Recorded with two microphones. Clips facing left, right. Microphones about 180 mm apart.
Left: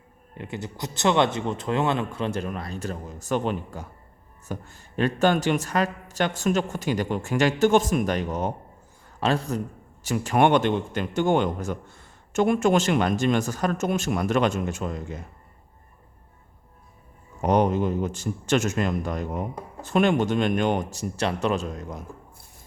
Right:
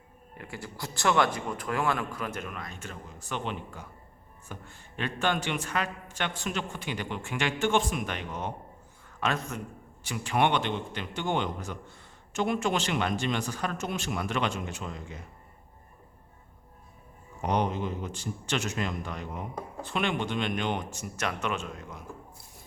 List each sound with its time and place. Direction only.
0.3 s a man's voice: 20° left (ahead or behind); by 15.2 s 45° left (ahead or behind)
17.4 s a man's voice: 45° left (ahead or behind)